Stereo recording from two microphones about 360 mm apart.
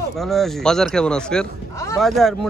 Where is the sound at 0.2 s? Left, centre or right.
Centre.